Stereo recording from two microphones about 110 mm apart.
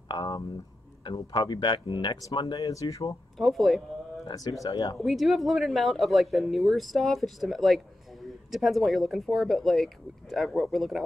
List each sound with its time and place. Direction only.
0.1 s speech: 40° left (ahead or behind)
2.3 s speech: 35° left (ahead or behind)
3.3 s speech: centre (ahead or behind)
4.3 s speech: 35° left (ahead or behind)
4.9 s speech: centre (ahead or behind)